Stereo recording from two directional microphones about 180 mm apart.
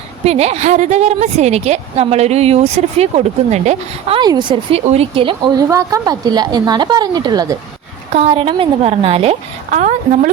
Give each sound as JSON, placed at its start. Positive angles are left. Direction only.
{"t": 0.3, "sound": "a woman's voice", "side_deg": -35}
{"t": 4.2, "sound": "a woman's voice", "side_deg": -25}